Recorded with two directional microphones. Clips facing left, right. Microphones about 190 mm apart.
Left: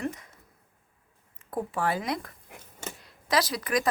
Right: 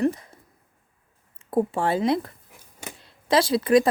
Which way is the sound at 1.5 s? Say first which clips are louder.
Right 6 dB; 25° right (ahead or behind).